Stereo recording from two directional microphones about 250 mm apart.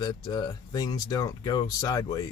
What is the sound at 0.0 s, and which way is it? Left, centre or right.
Speech, centre.